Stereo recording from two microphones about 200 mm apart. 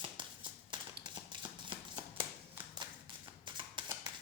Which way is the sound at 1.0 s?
25° right (ahead or behind).